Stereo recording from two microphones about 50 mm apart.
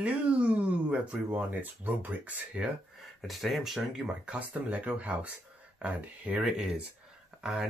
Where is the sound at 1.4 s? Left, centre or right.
Right.